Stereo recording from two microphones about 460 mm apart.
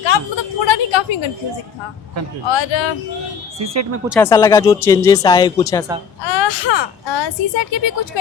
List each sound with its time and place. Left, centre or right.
0.0 s a woman's voice: left
2.5 s a woman's voice: left
4.1 s speech: centre
6.2 s speech: left